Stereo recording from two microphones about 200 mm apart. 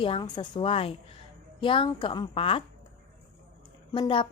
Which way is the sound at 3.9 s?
25° left (ahead or behind).